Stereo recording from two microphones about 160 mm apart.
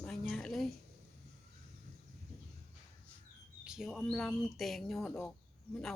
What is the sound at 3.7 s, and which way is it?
Speech, centre (ahead or behind).